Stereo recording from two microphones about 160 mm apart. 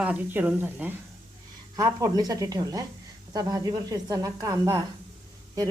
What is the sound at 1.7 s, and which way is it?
Speech, 25° right (ahead or behind).